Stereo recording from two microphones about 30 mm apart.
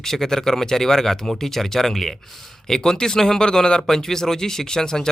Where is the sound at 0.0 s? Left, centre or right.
Centre.